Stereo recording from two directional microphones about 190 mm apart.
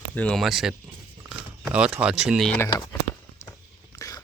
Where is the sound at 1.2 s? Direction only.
5° right (ahead or behind).